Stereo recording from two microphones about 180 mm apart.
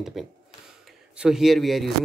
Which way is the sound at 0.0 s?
Centre (ahead or behind).